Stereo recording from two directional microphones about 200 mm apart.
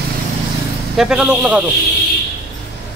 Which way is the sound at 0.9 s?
5° right (ahead or behind).